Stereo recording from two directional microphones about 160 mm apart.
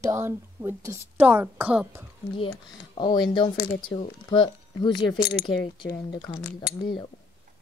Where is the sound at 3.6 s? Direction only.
65° left (ahead or behind).